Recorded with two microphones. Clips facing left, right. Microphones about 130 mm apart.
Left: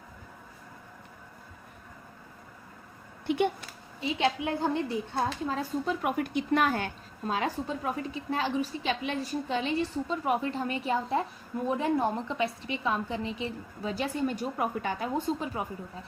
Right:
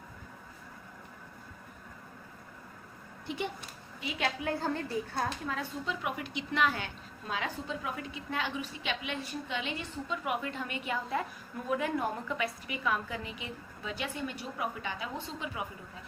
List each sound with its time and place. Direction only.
3.2 s speech: 60° left (ahead or behind)
4.0 s a woman's voice: 25° left (ahead or behind)
5.8 s a woman's voice: 50° left (ahead or behind)